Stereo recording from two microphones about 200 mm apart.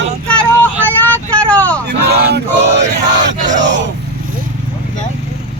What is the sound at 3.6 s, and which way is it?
Vehicle, 65° right (ahead or behind).